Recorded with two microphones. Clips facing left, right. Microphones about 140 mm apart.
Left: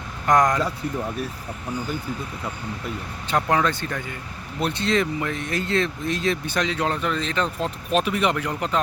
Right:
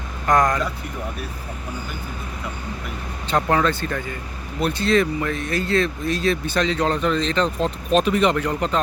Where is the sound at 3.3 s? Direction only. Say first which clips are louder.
Right 2 dB; 10° left (ahead or behind).